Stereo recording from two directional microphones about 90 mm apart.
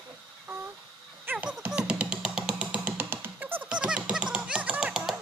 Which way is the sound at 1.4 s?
10° right (ahead or behind).